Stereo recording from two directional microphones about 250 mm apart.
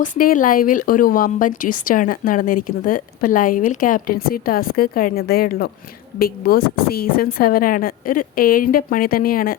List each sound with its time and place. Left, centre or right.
0.0 s speech: left